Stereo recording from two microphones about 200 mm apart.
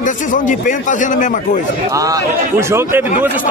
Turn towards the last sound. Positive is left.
turn(degrees=-15)  # may be behind; listen again after turning